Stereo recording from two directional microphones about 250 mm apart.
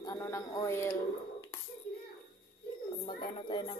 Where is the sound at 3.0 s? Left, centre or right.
Centre.